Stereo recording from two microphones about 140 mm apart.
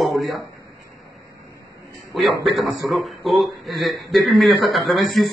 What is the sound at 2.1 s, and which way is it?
A man's voice, centre (ahead or behind).